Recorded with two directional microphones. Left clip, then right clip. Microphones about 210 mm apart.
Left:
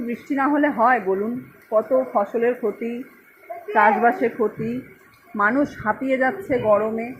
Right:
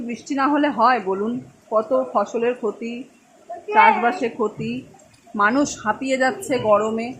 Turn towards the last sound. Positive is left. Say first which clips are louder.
# right 1 dB
turn(degrees=-15)  # may be behind; listen again after turning